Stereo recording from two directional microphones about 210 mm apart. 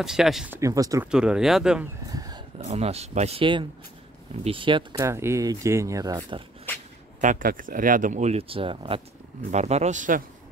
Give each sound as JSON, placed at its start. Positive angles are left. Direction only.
{"t": 0.0, "sound": "speech", "side_deg": 0}
{"t": 0.6, "sound": "speech", "side_deg": -15}
{"t": 1.1, "sound": "speech", "side_deg": -5}
{"t": 2.0, "sound": "a sound", "side_deg": -20}
{"t": 2.6, "sound": "speech", "side_deg": -30}
{"t": 6.7, "sound": "a sound", "side_deg": 10}
{"t": 7.2, "sound": "speech", "side_deg": -40}